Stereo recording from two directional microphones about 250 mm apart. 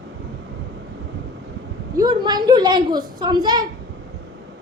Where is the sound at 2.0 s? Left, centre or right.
Centre.